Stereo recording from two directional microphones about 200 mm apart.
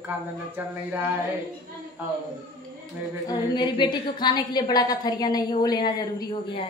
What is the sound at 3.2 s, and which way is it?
A woman's voice, 20° left (ahead or behind).